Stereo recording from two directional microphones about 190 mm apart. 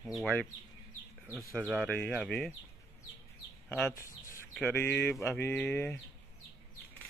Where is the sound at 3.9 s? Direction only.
50° left (ahead or behind).